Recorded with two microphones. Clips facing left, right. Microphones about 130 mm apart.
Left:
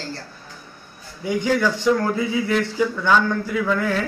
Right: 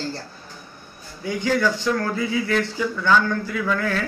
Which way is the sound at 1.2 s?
15° left (ahead or behind).